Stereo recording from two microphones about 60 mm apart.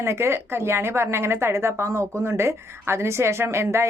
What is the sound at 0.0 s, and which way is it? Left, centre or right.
A woman's voice, right.